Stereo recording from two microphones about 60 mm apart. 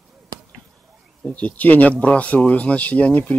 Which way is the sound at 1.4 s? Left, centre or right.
Left.